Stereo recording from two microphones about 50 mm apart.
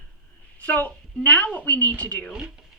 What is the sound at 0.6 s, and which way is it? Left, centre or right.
A woman's voice, left.